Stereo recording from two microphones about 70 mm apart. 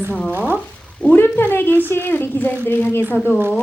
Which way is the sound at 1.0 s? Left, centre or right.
Left.